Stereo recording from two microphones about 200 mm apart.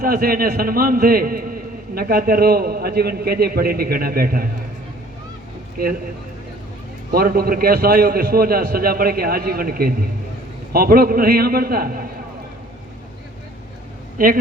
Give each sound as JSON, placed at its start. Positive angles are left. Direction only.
{"t": 0.0, "sound": "a man's voice", "side_deg": -45}
{"t": 7.1, "sound": "a man's voice", "side_deg": -50}
{"t": 14.2, "sound": "a man's voice", "side_deg": -45}